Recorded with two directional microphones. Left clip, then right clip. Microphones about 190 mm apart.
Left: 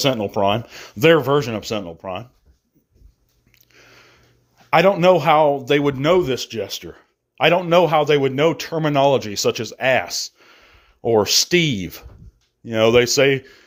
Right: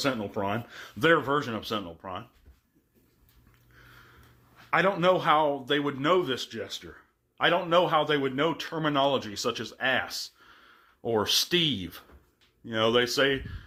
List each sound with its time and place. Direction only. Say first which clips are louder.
0.0 s a man's voice: left 11 dB; 45° left (ahead or behind)
3.8 s a sound: left 6 dB; 40° left (ahead or behind)
4.7 s a man's voice: left 10 dB; 40° left (ahead or behind)